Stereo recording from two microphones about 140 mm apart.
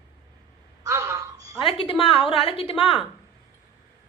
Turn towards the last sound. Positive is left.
turn(degrees=40)  # may be behind; listen again after turning